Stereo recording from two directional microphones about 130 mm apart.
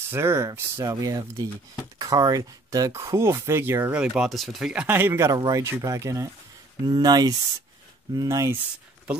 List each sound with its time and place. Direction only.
0.1 s speech: 20° right (ahead or behind)